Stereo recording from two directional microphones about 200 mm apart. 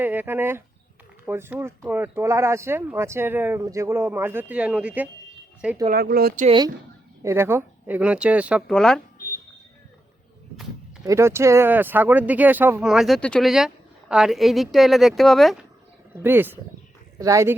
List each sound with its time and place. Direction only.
0.0 s speech: 10° right (ahead or behind)
5.9 s speech: 50° right (ahead or behind)
6.4 s speech: 25° right (ahead or behind)
7.2 s speech: 15° right (ahead or behind)
11.0 s speech: 15° right (ahead or behind); by 15.6 s centre (ahead or behind)
16.1 s speech: 10° right (ahead or behind)